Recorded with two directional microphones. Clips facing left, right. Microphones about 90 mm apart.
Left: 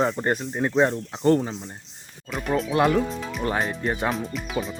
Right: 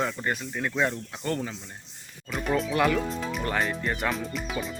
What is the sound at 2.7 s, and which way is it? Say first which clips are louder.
Speech: left 6 dB; 35° left (ahead or behind).